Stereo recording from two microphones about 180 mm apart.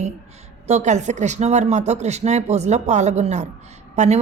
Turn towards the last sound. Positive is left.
turn(degrees=-40)  # may be behind; listen again after turning